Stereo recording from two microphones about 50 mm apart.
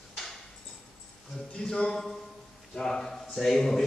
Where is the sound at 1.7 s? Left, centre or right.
Centre.